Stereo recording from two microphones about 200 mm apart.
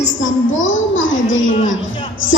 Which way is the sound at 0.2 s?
75° left (ahead or behind).